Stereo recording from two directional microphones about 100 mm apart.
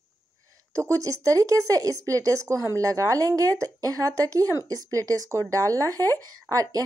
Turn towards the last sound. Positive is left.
turn(degrees=-35)  # may be behind; listen again after turning